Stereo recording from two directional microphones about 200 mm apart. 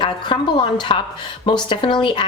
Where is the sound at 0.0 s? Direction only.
25° left (ahead or behind).